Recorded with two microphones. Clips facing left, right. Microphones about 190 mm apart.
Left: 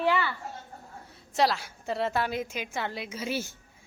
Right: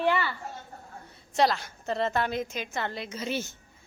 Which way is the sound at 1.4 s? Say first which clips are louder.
Right 1 dB; 5° left (ahead or behind).